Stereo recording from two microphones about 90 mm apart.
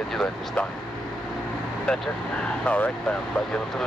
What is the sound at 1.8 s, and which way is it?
Speech, 10° left (ahead or behind).